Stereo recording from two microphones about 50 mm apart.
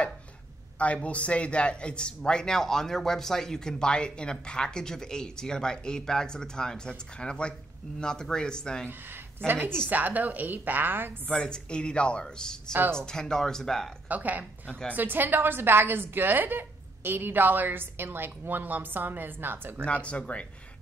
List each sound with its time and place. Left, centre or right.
0.7 s a man's voice: left
9.5 s a woman's voice: right
9.8 s a woman's voice: right
11.2 s a man's voice: centre
14.0 s a woman's voice: right
19.8 s speech: left